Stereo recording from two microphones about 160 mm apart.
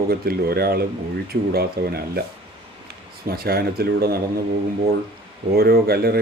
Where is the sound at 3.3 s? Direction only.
75° right (ahead or behind).